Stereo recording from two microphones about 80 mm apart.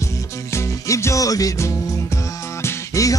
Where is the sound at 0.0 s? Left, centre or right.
Left.